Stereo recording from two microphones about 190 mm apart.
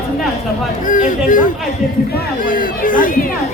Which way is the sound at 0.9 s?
45° left (ahead or behind).